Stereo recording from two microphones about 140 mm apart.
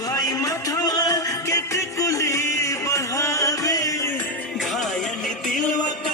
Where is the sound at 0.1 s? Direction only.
25° left (ahead or behind).